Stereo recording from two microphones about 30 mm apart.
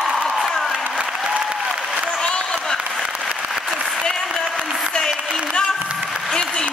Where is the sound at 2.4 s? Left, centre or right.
Centre.